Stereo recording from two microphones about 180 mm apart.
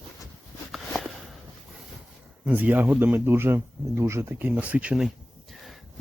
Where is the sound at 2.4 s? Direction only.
10° right (ahead or behind).